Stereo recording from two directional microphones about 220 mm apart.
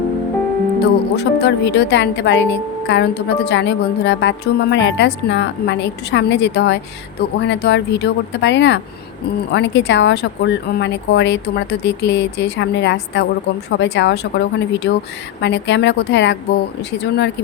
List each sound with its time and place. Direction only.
0.8 s a woman's voice: 50° left (ahead or behind)